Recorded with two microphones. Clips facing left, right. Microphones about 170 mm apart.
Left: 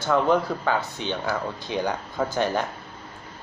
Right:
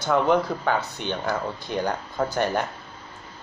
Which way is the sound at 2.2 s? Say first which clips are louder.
Right 1 dB; centre (ahead or behind).